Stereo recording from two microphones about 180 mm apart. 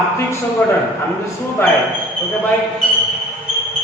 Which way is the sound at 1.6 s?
10° left (ahead or behind).